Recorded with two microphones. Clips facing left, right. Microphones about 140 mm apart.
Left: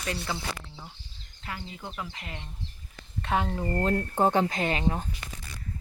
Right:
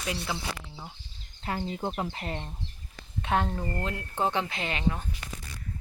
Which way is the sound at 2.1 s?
40° right (ahead or behind).